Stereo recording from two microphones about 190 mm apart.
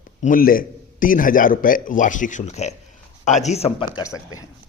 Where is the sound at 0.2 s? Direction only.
45° left (ahead or behind).